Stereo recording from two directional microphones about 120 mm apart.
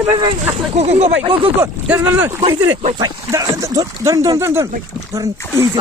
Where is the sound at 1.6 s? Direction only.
20° right (ahead or behind).